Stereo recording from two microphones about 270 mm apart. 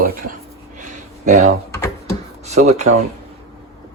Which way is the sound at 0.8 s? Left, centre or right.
Right.